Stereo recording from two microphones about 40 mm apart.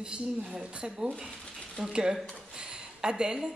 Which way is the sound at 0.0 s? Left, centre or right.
Right.